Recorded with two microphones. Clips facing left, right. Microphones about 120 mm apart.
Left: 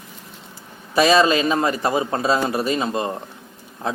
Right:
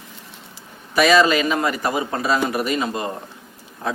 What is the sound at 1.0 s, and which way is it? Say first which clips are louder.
Speech: even; 25° left (ahead or behind).